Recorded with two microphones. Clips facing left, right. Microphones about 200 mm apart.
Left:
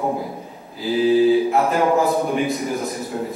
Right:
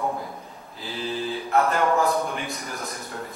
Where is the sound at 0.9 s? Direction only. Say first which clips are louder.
Left 15 dB; 5° left (ahead or behind).